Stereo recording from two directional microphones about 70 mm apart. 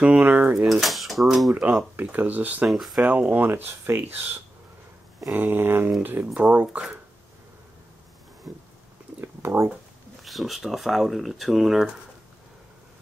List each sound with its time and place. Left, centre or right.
0.2 s speech: right
0.7 s speech: centre
2.0 s speech: right
2.7 s speech: centre
3.1 s speech: right
5.3 s a sound: right
6.4 s speech: right
9.2 s a sound: right
10.2 s speech: centre